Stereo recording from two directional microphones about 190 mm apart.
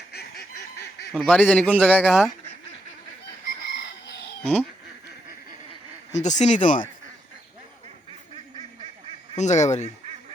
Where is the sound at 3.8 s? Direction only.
65° left (ahead or behind).